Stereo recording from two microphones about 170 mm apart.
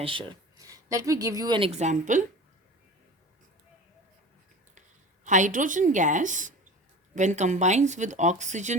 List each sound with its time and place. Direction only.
0.0 s speech: 30° right (ahead or behind); by 2.2 s 45° right (ahead or behind)
5.2 s speech: 45° right (ahead or behind)